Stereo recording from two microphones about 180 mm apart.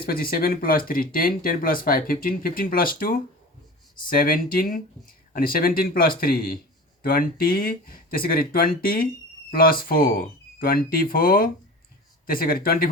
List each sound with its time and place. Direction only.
0.0 s speech: 55° left (ahead or behind)